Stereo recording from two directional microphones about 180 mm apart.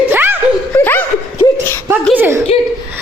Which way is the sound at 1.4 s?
25° left (ahead or behind).